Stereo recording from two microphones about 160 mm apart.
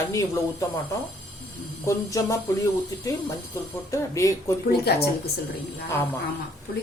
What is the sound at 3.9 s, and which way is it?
Speech, 20° left (ahead or behind).